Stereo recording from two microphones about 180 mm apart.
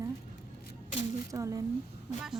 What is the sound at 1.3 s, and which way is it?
Speech, 20° right (ahead or behind).